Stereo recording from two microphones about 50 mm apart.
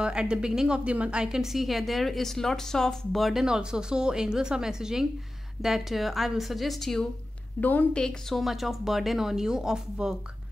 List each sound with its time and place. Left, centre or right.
0.0 s a woman's voice: centre
3.2 s a woman's voice: centre
3.4 s a woman's voice: centre
7.6 s a woman's voice: left
7.9 s a woman's voice: centre
8.4 s a woman's voice: centre